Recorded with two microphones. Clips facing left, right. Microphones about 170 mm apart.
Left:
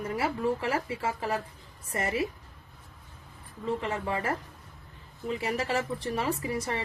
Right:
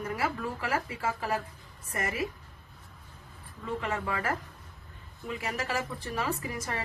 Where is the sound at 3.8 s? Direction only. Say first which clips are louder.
Left 1 dB; 30° left (ahead or behind).